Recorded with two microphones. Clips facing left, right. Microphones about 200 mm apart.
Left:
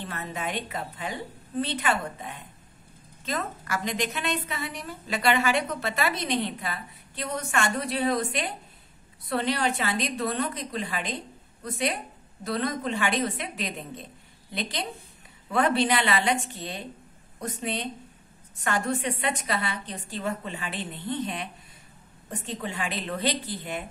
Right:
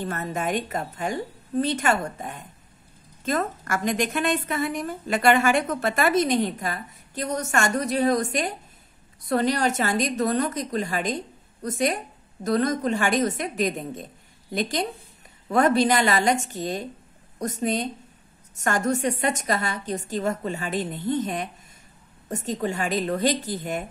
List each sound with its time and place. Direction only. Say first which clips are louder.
0.0 s a woman's voice: right 6 dB; 45° right (ahead or behind)